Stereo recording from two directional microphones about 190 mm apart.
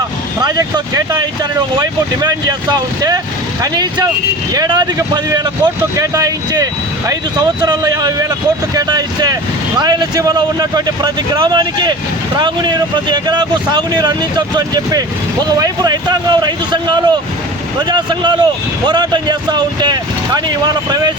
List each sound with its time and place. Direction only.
0.3 s speech: 20° right (ahead or behind)
2.2 s speech: 20° right (ahead or behind)